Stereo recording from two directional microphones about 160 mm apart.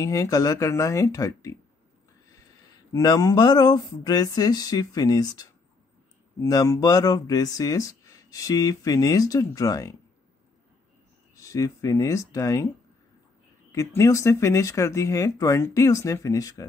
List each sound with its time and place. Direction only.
0.0 s speech: 20° left (ahead or behind)
2.9 s speech: 25° left (ahead or behind)
11.3 s speech: 20° left (ahead or behind)
13.7 s speech: 20° left (ahead or behind)